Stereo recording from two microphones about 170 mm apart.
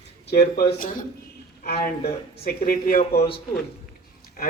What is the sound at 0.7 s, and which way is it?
Speech, 50° left (ahead or behind).